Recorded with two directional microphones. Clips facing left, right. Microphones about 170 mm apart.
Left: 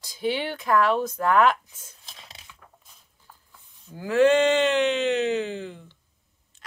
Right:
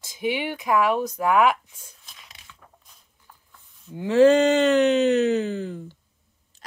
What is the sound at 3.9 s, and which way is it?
Speech, 30° right (ahead or behind).